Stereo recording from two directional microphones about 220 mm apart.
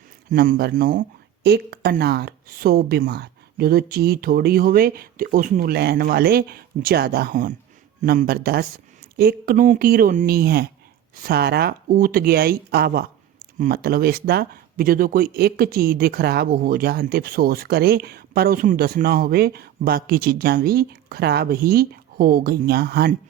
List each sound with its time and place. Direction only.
0.3 s speech: 35° right (ahead or behind)